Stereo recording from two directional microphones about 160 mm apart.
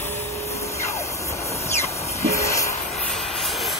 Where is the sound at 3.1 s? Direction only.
Centre (ahead or behind).